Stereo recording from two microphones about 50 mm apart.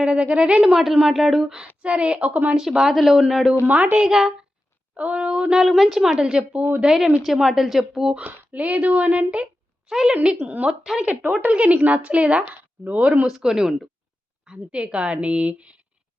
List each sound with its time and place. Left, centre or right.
0.0 s a woman's voice: right
1.1 s a woman's voice: centre; by 2.6 s right
2.8 s a woman's voice: centre
3.7 s speech: right
3.9 s a woman's voice: centre
4.9 s a woman's voice: right
6.8 s a woman's voice: centre
8.1 s a woman's voice: right
9.9 s a woman's voice: centre
10.3 s speech: right
10.7 s a woman's voice: centre
11.0 s a woman's voice: right
13.2 s a woman's voice: centre
14.4 s a woman's voice: right